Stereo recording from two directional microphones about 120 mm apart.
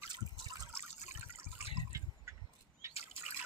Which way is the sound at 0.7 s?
20° right (ahead or behind).